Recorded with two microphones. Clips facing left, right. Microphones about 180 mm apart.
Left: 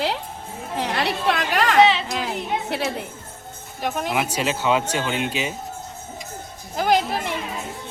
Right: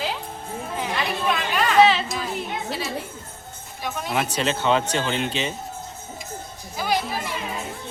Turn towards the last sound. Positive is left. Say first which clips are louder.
# left 5 dB
turn(degrees=55)  # may be behind; listen again after turning